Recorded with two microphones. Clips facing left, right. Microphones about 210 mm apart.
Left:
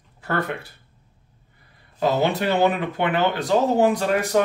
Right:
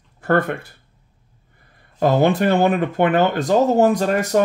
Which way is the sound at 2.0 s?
50° right (ahead or behind).